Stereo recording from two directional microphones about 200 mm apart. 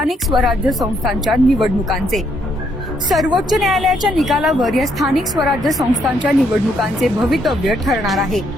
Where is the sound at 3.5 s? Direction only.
Centre (ahead or behind).